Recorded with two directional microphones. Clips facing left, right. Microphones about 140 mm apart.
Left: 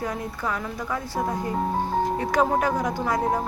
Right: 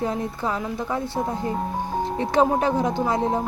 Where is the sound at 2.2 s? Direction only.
25° right (ahead or behind).